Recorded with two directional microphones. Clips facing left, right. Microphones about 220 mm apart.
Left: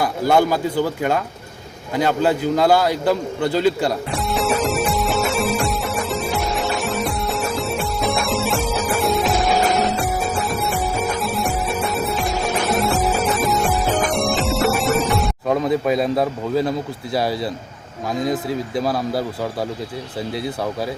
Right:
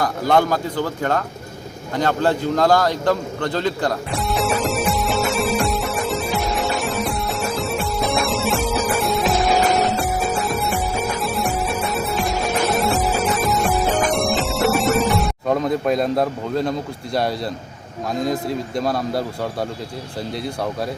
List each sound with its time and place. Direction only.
0.0 s speech: 10° left (ahead or behind)
2.0 s a sound: 5° left (ahead or behind)
18.1 s a man's voice: centre (ahead or behind)